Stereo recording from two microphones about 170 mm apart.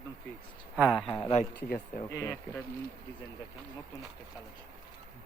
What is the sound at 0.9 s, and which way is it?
Speech, 30° left (ahead or behind).